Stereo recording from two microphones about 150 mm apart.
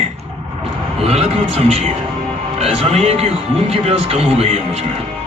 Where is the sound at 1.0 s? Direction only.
40° right (ahead or behind).